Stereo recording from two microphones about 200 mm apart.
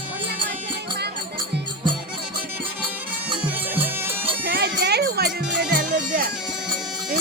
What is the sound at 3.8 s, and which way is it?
Music, 10° right (ahead or behind).